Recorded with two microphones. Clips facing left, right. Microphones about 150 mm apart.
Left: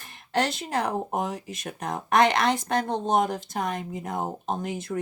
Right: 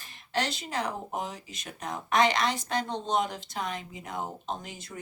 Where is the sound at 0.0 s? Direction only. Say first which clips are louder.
Left 5 dB; 55° left (ahead or behind).